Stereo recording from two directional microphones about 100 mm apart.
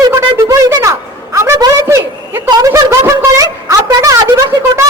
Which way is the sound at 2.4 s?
35° right (ahead or behind).